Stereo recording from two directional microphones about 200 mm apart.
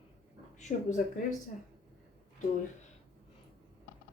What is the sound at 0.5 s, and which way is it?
Speech, 35° left (ahead or behind).